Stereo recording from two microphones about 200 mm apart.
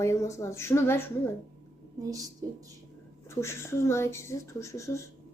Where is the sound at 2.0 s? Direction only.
15° right (ahead or behind).